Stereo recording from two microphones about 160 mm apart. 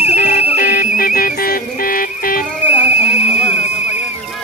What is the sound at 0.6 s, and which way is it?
Music, 70° left (ahead or behind).